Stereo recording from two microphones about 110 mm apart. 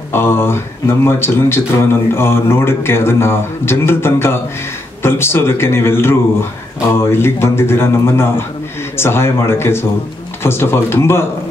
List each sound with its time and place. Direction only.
0.1 s speech: 20° left (ahead or behind)